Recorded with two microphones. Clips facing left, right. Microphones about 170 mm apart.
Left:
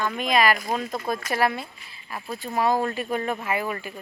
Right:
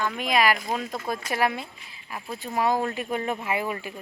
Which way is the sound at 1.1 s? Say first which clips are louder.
Left 2 dB; 10° right (ahead or behind).